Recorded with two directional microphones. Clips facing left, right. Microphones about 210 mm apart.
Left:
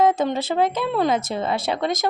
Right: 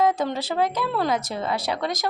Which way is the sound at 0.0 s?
25° left (ahead or behind).